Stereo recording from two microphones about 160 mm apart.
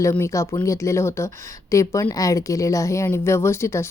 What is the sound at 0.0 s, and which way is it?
A woman's voice, 20° left (ahead or behind).